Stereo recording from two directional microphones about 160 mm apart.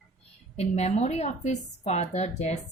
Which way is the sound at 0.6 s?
45° left (ahead or behind).